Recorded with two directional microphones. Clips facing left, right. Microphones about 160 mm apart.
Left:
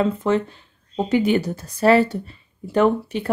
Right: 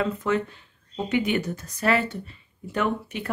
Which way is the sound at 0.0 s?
30° left (ahead or behind).